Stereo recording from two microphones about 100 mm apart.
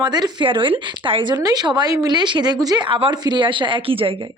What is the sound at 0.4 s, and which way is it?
Speech, 60° right (ahead or behind).